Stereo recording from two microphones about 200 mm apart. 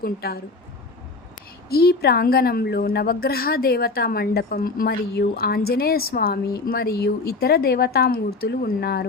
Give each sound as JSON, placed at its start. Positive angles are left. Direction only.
{"t": 0.0, "sound": "a woman's voice", "side_deg": 50}
{"t": 1.7, "sound": "a woman's voice", "side_deg": 50}